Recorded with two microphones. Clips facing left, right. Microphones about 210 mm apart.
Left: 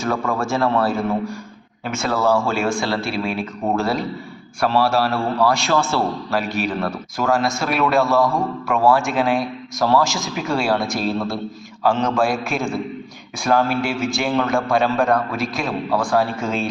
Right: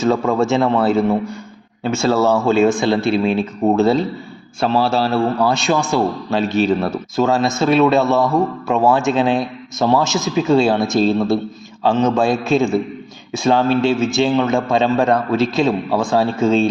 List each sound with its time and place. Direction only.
0.0 s a man's voice: 20° right (ahead or behind)